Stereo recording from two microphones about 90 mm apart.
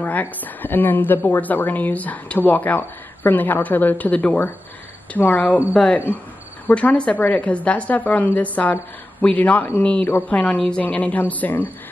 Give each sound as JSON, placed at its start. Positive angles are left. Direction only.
{"t": 0.0, "sound": "a woman's voice", "side_deg": 20}
{"t": 6.7, "sound": "a woman's voice", "side_deg": 15}